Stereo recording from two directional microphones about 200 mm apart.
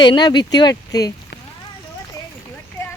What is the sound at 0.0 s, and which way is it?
Speech, 20° left (ahead or behind).